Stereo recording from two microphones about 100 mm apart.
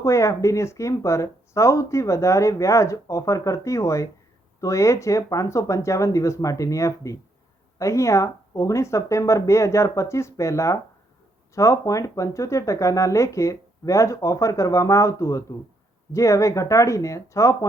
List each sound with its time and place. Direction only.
0.0 s speech: 30° left (ahead or behind)